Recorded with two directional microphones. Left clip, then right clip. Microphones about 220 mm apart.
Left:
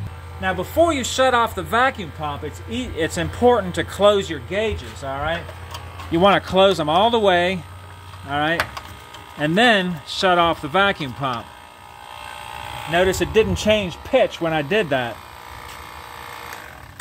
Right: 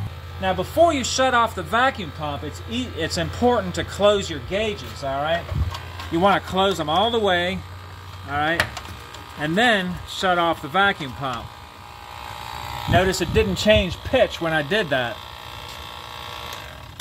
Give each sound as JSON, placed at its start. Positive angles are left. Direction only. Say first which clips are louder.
{"t": 0.4, "sound": "speech", "louder": "even", "side_deg": 20}
{"t": 6.1, "sound": "speech", "louder": "left 4 dB", "side_deg": 55}
{"t": 12.9, "sound": "speech", "louder": "left 2 dB", "side_deg": 30}
{"t": 13.7, "sound": "speech", "louder": "right 1 dB", "side_deg": 15}